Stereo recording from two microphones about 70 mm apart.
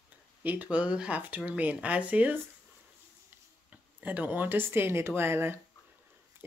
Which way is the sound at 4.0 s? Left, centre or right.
Right.